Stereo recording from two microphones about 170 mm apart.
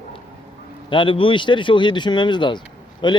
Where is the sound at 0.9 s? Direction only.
30° left (ahead or behind).